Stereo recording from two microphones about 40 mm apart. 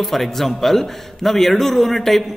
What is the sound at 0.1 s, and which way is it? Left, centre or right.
A man's voice, centre.